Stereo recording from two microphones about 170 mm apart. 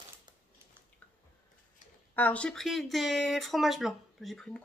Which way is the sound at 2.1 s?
10° left (ahead or behind).